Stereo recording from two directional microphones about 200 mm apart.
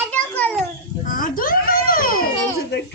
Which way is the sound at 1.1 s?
45° left (ahead or behind).